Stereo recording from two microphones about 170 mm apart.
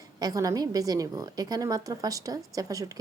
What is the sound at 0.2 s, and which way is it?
A woman's voice, 20° right (ahead or behind).